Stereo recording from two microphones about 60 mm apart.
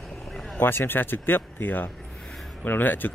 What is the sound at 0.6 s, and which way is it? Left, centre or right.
Speech, left.